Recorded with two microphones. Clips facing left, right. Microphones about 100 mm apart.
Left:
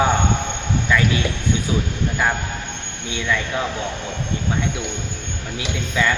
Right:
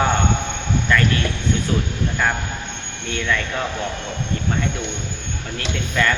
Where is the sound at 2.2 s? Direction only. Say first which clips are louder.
Left 1 dB; 10° left (ahead or behind).